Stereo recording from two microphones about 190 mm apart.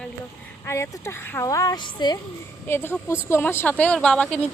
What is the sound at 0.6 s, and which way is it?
Speech, 15° left (ahead or behind).